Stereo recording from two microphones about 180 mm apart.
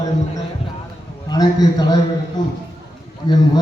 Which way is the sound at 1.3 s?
20° left (ahead or behind).